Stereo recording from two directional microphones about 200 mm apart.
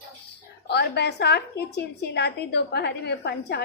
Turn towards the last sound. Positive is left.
turn(degrees=55)  # may be behind; listen again after turning